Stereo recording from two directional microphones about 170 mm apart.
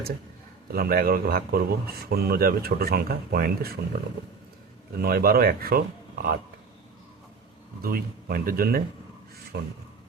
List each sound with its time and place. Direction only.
0.7 s speech: 60° right (ahead or behind)
4.9 s speech: 60° right (ahead or behind)
7.8 s speech: 60° right (ahead or behind)
9.5 s speech: 75° right (ahead or behind)